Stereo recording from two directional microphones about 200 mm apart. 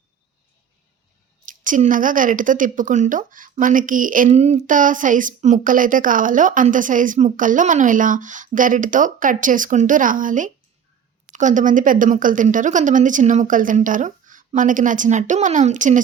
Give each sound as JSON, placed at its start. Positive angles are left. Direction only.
{"t": 1.5, "sound": "a woman's voice", "side_deg": -40}